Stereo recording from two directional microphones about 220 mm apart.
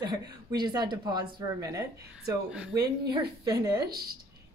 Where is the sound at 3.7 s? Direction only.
45° right (ahead or behind).